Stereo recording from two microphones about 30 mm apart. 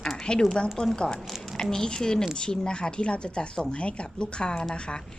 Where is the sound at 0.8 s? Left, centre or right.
Left.